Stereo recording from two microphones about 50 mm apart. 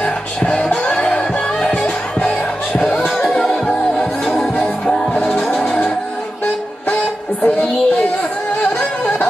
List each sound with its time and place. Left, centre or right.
0.0 s music: left
7.4 s music: left